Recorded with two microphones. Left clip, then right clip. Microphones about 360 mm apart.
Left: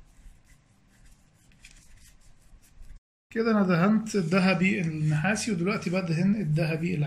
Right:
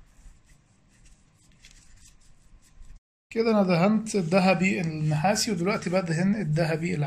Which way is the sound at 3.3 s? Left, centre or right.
Centre.